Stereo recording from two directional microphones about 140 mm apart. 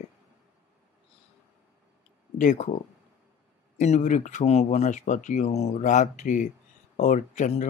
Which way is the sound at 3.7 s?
55° left (ahead or behind).